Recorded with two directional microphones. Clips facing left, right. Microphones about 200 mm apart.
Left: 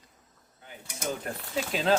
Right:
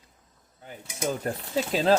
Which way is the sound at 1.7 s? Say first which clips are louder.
Right 4 dB; 35° right (ahead or behind).